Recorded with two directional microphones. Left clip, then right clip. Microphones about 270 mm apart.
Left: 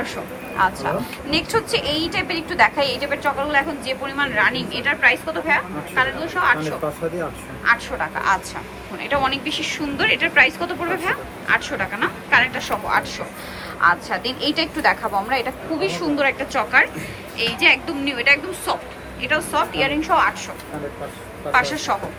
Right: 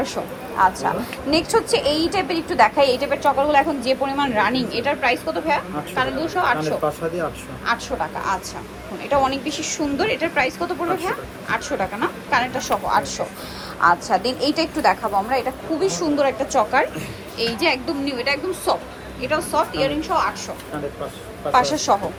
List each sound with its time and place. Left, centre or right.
0.5 s a woman's voice: centre
6.8 s speech: centre
7.7 s a woman's voice: centre
9.0 s a woman's voice: centre
21.5 s a woman's voice: centre